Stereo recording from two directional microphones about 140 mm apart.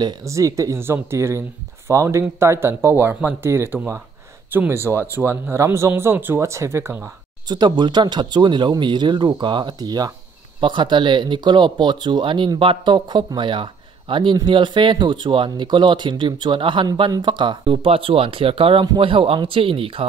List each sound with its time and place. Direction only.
0.0 s speech: 20° right (ahead or behind)
4.9 s speech: 20° left (ahead or behind)
5.2 s speech: 20° right (ahead or behind)
7.4 s speech: 30° right (ahead or behind)